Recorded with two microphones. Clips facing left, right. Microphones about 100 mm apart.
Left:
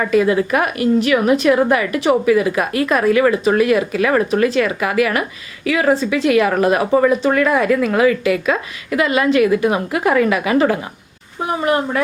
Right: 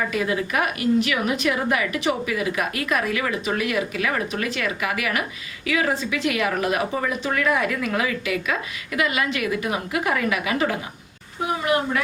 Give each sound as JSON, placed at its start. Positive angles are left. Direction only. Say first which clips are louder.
{"t": 0.3, "sound": "a woman's voice", "louder": "left 7 dB", "side_deg": 50}